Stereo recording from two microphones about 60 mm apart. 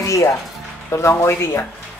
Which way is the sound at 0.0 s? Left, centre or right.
Left.